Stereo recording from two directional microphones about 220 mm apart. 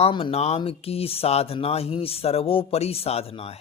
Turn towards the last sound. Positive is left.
turn(degrees=25)  # may be behind; listen again after turning